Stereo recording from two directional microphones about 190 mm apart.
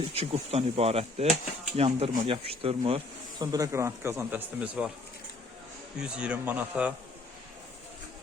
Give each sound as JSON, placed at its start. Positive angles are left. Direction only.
{"t": 0.1, "sound": "speech", "side_deg": -30}
{"t": 6.0, "sound": "a man's voice", "side_deg": -5}